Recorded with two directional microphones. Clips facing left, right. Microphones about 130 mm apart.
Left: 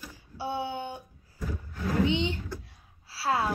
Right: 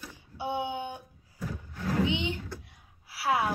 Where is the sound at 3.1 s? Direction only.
15° right (ahead or behind).